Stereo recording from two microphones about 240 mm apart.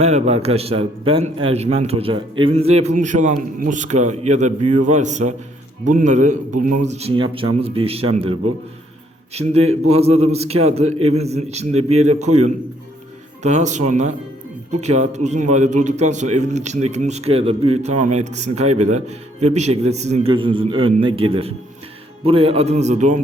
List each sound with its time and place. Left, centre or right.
0.0 s a man's voice: right
13.4 s a man's voice: right